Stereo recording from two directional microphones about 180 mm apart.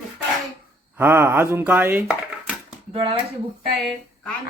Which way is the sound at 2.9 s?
30° right (ahead or behind).